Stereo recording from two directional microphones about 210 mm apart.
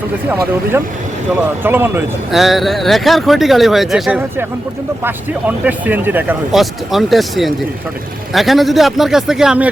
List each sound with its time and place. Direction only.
1.3 s speech: 10° right (ahead or behind)